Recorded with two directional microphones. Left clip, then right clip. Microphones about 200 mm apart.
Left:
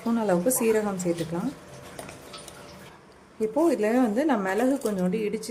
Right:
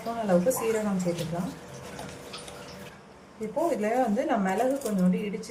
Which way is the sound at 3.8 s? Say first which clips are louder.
Left 2 dB; 60° left (ahead or behind).